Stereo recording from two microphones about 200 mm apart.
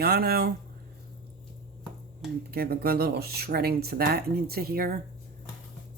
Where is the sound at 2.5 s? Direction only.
50° right (ahead or behind).